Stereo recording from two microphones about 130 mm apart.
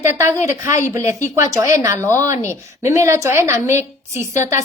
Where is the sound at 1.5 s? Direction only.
25° right (ahead or behind).